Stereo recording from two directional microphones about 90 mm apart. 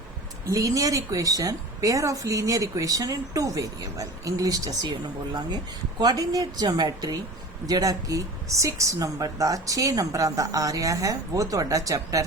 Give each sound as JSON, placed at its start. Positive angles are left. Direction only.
{"t": 0.4, "sound": "speech", "side_deg": -40}
{"t": 4.9, "sound": "speech", "side_deg": -55}